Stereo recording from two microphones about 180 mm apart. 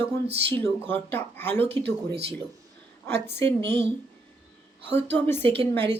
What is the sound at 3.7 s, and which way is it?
Speech, 70° right (ahead or behind).